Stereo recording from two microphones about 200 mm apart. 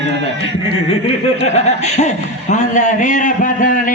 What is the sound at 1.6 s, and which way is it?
A man's voice, 35° left (ahead or behind).